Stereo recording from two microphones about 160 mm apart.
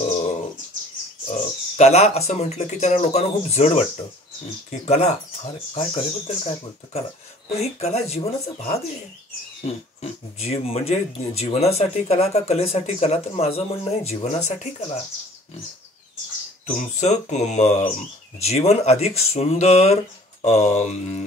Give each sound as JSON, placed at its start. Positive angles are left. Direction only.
{"t": 1.2, "sound": "speech", "side_deg": 45}
{"t": 16.7, "sound": "speech", "side_deg": 45}